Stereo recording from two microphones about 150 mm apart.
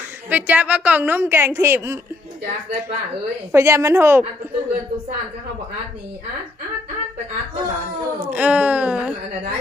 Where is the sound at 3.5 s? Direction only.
20° right (ahead or behind).